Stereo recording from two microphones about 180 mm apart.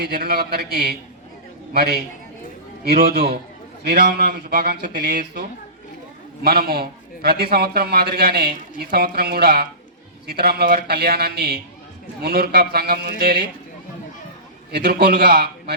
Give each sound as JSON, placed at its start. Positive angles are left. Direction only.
{"t": 0.0, "sound": "a man's voice", "side_deg": -60}
{"t": 14.7, "sound": "a man's voice", "side_deg": -65}